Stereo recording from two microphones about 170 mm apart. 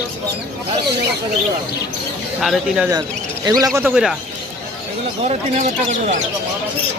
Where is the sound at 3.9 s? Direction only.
5° right (ahead or behind).